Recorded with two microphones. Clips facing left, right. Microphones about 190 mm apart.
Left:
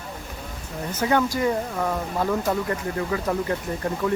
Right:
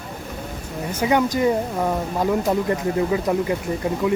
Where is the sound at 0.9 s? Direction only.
15° right (ahead or behind).